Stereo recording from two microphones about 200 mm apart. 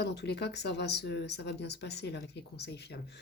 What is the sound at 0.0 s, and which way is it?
Speech, 55° left (ahead or behind).